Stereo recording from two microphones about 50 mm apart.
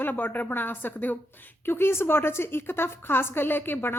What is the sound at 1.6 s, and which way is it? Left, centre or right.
Speech, left.